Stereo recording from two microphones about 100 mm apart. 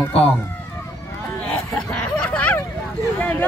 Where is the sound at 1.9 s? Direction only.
10° left (ahead or behind).